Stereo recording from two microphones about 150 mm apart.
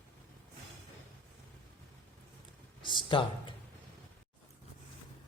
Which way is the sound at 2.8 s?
35° left (ahead or behind).